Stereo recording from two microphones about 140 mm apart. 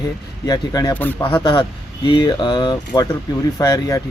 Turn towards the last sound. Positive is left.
turn(degrees=25)  # may be behind; listen again after turning